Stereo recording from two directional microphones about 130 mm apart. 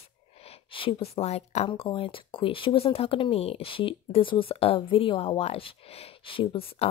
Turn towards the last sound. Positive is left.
turn(degrees=45)  # may be behind; listen again after turning